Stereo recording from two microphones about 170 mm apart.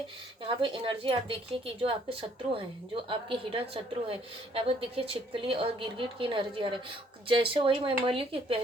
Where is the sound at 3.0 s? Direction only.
30° right (ahead or behind).